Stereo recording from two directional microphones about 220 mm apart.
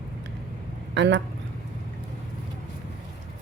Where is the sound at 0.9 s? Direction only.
55° right (ahead or behind).